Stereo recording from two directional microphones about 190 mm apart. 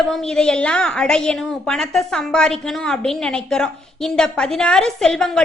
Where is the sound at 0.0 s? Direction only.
Centre (ahead or behind).